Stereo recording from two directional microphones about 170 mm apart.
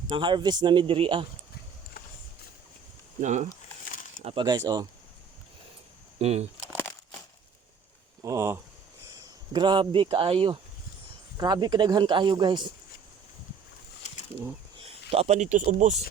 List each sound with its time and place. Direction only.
0.1 s speech: 30° right (ahead or behind)
3.2 s speech: 45° right (ahead or behind)
4.4 s speech: 20° right (ahead or behind)
6.1 s speech: 40° right (ahead or behind)
8.2 s speech: 15° right (ahead or behind)
15.1 s speech: 40° right (ahead or behind)